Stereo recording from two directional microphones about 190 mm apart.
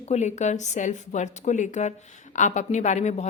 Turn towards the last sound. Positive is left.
turn(degrees=40)  # may be behind; listen again after turning